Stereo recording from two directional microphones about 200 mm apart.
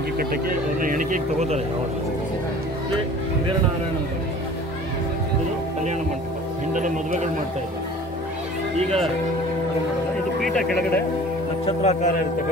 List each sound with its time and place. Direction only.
0.2 s speech: 45° right (ahead or behind)
6.7 s speech: 40° right (ahead or behind)
8.7 s speech: 30° right (ahead or behind)
10.4 s speech: centre (ahead or behind)
11.6 s speech: 35° left (ahead or behind)